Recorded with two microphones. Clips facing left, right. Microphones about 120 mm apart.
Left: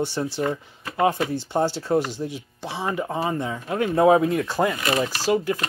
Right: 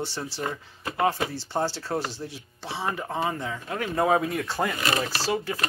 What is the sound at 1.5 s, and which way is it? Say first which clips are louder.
Speech: left 6 dB; 15° left (ahead or behind).